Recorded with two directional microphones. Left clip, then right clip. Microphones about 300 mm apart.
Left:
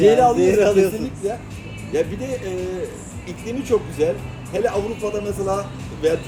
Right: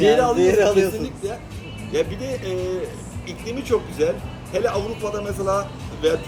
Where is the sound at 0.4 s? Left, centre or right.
Centre.